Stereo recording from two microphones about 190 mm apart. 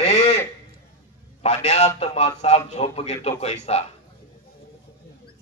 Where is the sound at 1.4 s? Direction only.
35° left (ahead or behind).